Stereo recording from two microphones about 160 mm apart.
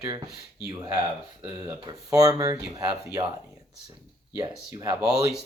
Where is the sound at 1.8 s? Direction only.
25° right (ahead or behind).